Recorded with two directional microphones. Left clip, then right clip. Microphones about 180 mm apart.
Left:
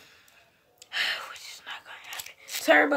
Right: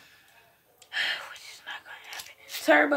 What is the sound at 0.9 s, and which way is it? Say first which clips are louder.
Whispering: left 1 dB; 45° left (ahead or behind).